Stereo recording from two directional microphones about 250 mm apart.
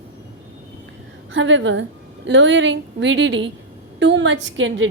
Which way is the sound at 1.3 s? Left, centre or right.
Right.